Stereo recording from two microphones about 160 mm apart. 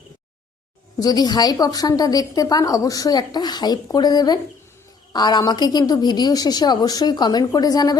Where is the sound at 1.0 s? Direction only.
25° left (ahead or behind).